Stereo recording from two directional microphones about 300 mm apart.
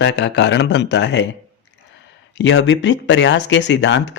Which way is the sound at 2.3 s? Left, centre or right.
Left.